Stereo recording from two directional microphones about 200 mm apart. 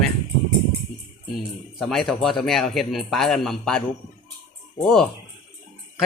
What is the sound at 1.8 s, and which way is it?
A man's voice, centre (ahead or behind).